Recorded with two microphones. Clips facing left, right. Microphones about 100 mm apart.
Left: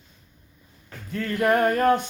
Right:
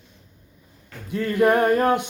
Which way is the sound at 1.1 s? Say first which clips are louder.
Right 3 dB; 10° right (ahead or behind).